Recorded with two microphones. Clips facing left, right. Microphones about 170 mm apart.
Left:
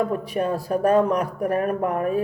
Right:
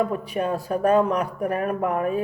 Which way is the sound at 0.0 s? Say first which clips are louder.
Left 1 dB; 40° left (ahead or behind).